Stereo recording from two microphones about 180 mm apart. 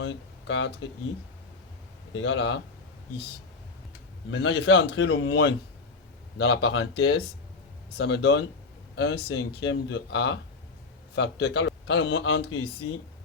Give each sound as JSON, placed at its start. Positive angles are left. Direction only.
{"t": 0.0, "sound": "speech", "side_deg": 90}
{"t": 2.1, "sound": "speech", "side_deg": 90}
{"t": 4.3, "sound": "a man's voice", "side_deg": 85}